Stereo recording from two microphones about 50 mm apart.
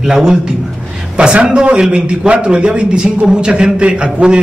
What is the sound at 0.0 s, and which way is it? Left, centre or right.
A man's voice, centre.